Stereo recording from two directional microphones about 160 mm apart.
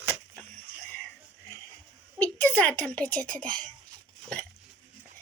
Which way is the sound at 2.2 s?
10° left (ahead or behind).